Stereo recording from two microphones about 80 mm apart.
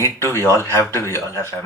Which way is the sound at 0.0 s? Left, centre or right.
Left.